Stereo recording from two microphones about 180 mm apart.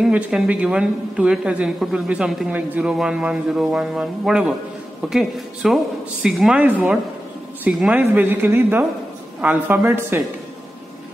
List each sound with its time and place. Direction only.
0.0 s a woman's voice: 5° right (ahead or behind)